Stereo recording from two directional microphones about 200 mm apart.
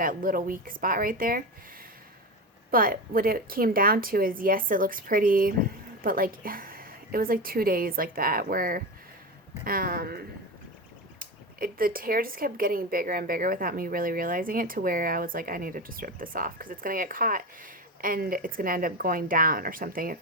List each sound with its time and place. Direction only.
0.0 s speech: 45° right (ahead or behind)
2.7 s speech: 45° right (ahead or behind)